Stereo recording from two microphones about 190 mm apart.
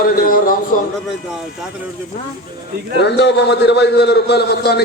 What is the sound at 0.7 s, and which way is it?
Speech, 45° left (ahead or behind).